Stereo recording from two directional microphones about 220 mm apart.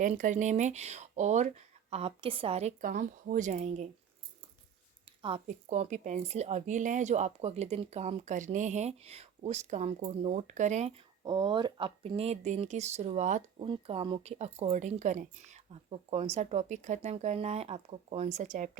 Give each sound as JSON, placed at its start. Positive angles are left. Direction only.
{"t": 0.0, "sound": "a woman's voice", "side_deg": -35}
{"t": 5.2, "sound": "a woman's voice", "side_deg": -30}